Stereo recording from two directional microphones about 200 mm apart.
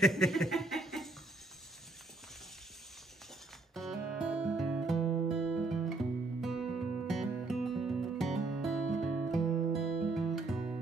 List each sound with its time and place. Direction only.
0.0 s chuckle: centre (ahead or behind)
3.7 s music: centre (ahead or behind)